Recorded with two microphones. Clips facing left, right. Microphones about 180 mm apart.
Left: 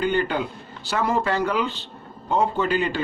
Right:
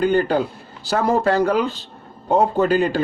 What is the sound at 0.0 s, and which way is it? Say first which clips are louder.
A man's voice: right 5 dB; 40° right (ahead or behind).